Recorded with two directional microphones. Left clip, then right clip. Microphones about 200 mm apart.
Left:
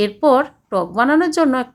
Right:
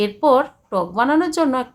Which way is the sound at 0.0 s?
15° left (ahead or behind).